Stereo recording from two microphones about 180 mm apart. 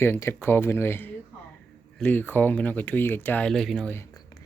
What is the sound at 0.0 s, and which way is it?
Speech, 15° left (ahead or behind).